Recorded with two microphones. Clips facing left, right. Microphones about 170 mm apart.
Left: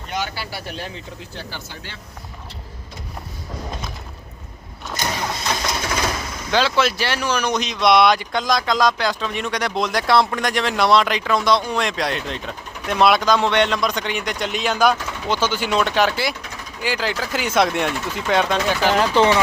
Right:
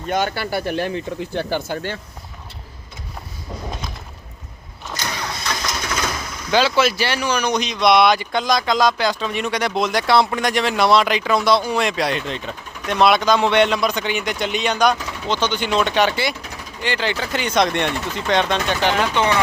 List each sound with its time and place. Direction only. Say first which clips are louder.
0.1 s speech: right 7 dB; 55° right (ahead or behind)
6.5 s speech: right 2 dB; 5° right (ahead or behind)
18.9 s speech: left 3 dB; 35° left (ahead or behind)